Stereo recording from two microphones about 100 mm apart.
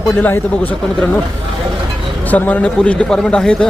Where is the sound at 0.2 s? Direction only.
20° left (ahead or behind).